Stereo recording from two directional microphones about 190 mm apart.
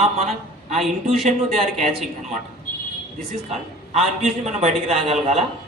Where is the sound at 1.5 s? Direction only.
Centre (ahead or behind).